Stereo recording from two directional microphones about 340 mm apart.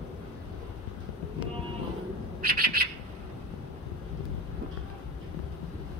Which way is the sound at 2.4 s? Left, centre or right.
Right.